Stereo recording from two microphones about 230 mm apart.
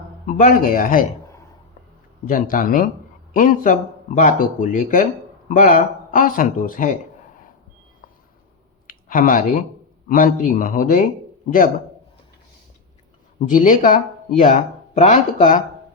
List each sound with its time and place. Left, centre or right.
0.3 s speech: left
2.2 s speech: left
8.9 s speech: left
13.5 s speech: left